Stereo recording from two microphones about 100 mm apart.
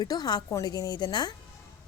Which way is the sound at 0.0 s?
45° left (ahead or behind).